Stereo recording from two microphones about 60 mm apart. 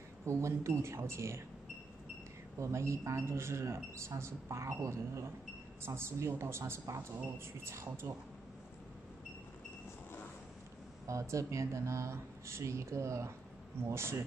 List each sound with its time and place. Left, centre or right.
0.2 s a man's voice: right
2.6 s a man's voice: right
11.1 s a man's voice: right